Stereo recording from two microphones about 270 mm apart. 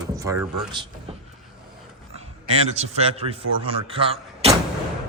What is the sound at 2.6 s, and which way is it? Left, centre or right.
Speech, right.